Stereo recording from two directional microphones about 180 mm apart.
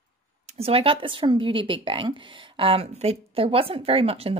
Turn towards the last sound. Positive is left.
turn(degrees=-35)  # may be behind; listen again after turning